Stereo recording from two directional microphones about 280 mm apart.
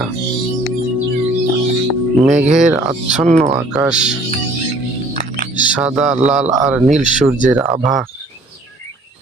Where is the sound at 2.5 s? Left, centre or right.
Centre.